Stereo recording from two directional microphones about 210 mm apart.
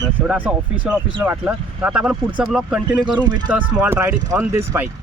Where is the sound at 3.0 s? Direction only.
20° right (ahead or behind).